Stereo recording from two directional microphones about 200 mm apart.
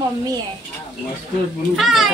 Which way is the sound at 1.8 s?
Centre (ahead or behind).